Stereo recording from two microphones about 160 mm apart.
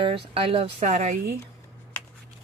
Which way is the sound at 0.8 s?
50° right (ahead or behind).